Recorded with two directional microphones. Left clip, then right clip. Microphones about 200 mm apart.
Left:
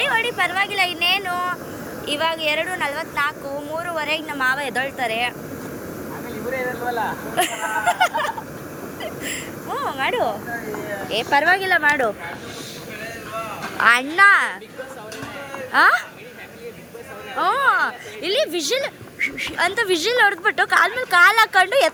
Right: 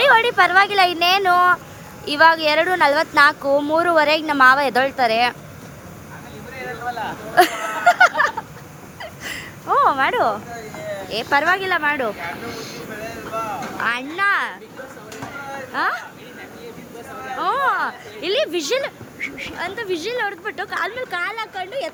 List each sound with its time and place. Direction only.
0.0 s speech: 25° right (ahead or behind)
7.3 s a sound: 20° right (ahead or behind)
11.1 s a woman's voice: 10° right (ahead or behind)
13.7 s speech: centre (ahead or behind)
15.7 s speech: centre (ahead or behind)
17.3 s a woman's voice: 5° right (ahead or behind)
19.2 s speech: centre (ahead or behind)